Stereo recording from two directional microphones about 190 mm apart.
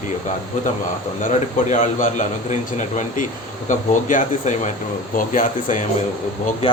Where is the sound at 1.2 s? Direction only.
40° left (ahead or behind).